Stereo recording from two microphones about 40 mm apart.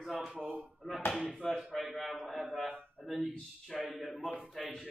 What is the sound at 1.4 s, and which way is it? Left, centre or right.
Speech, centre.